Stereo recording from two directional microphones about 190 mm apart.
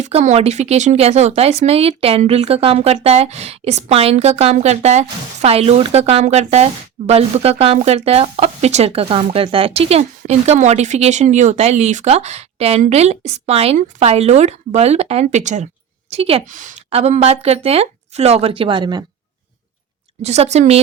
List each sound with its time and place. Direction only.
0.0 s speech: 35° right (ahead or behind)
20.2 s speech: 35° right (ahead or behind)